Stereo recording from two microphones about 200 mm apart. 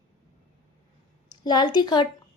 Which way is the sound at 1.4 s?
20° left (ahead or behind).